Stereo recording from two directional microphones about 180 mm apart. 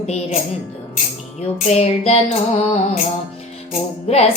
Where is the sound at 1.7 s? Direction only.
35° left (ahead or behind).